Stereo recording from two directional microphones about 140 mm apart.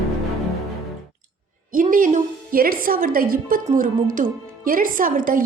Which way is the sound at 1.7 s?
75° right (ahead or behind).